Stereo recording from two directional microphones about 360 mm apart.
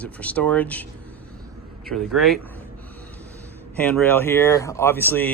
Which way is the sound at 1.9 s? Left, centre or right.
Centre.